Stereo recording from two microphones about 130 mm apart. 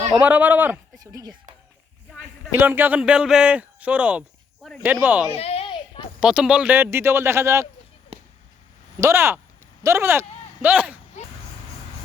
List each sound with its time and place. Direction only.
0.2 s speech: 15° right (ahead or behind)
1.0 s speech: 30° right (ahead or behind)
2.6 s speech: 15° right (ahead or behind)
5.3 s a sound: 50° left (ahead or behind)
6.1 s speech: 5° right (ahead or behind); by 7.7 s 20° right (ahead or behind)
9.0 s speech: 20° right (ahead or behind)